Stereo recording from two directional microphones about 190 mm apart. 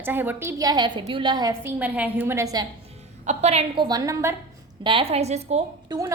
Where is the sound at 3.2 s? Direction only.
35° right (ahead or behind); by 4.4 s 15° right (ahead or behind).